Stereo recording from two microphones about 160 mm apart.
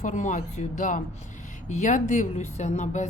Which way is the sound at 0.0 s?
50° left (ahead or behind).